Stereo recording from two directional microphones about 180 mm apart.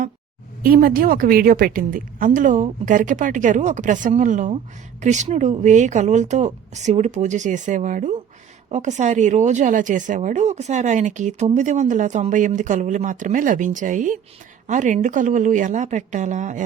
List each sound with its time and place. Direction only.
0.6 s a woman's voice: 55° right (ahead or behind)